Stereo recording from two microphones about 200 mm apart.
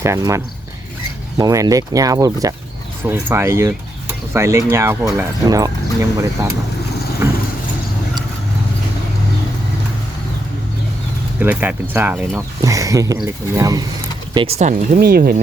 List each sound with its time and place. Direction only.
0.0 s speech: 15° right (ahead or behind)
7.2 s vehicle: 15° right (ahead or behind)
11.3 s speech: 10° right (ahead or behind)
14.3 s speech: 35° right (ahead or behind); by 15.4 s 50° right (ahead or behind)